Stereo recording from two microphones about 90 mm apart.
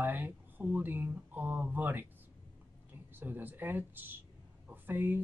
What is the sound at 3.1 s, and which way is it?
Speech, 20° right (ahead or behind).